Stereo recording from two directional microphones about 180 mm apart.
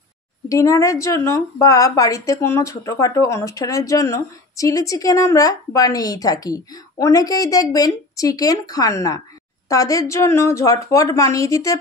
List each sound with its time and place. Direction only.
0.5 s a woman's voice: 15° left (ahead or behind)